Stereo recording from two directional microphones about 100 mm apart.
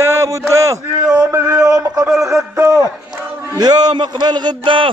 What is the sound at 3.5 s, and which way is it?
A man's voice, 40° right (ahead or behind).